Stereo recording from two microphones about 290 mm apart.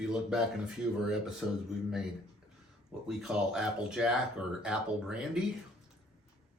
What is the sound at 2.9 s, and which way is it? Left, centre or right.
Speech, centre.